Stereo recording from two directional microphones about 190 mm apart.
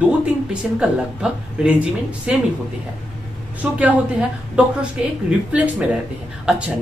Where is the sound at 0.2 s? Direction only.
5° right (ahead or behind).